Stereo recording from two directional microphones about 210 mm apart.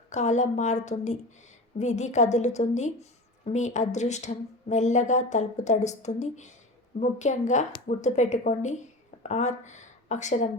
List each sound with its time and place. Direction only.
0.1 s a woman's voice: 35° left (ahead or behind)